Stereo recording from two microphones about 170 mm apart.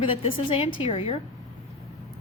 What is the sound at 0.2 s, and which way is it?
A woman's voice, 30° left (ahead or behind).